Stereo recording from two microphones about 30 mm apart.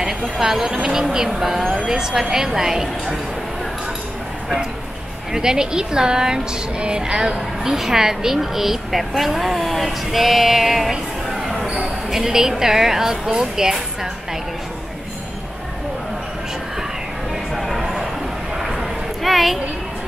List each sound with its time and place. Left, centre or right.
0.0 s a woman's voice: right
1.9 s a woman's voice: right
5.3 s a woman's voice: right
7.3 s a woman's voice: centre
17.6 s a sound: centre